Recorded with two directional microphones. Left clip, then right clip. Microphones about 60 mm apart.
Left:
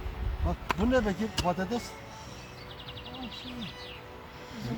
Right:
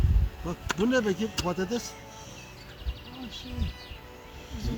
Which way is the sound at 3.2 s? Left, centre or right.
Centre.